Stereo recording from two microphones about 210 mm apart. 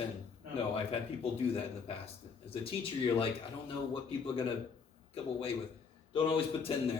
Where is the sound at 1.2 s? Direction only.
25° left (ahead or behind).